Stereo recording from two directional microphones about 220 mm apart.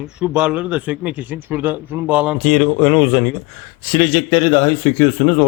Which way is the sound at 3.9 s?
20° left (ahead or behind).